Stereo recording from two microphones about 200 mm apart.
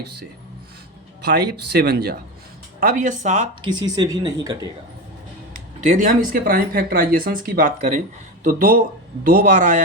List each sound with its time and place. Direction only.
1.2 s speech: 55° right (ahead or behind)
2.8 s speech: 40° right (ahead or behind)
3.6 s speech: 20° right (ahead or behind)
5.5 s speech: 45° right (ahead or behind)